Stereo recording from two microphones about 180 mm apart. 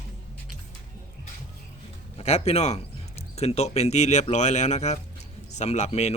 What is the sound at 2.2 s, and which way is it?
Speech, 35° left (ahead or behind).